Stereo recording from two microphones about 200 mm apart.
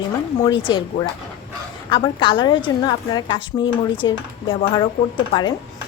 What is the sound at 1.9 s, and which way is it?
A woman's voice, 25° left (ahead or behind).